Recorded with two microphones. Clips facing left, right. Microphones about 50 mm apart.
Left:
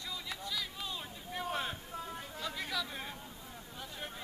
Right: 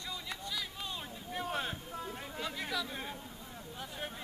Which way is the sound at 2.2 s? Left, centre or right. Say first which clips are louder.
Right 1 dB; centre.